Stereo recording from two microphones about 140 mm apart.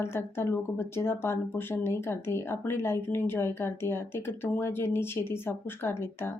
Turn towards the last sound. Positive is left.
turn(degrees=15)  # may be behind; listen again after turning